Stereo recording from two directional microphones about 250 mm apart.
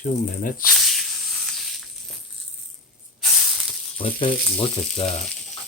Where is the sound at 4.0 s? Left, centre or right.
Left.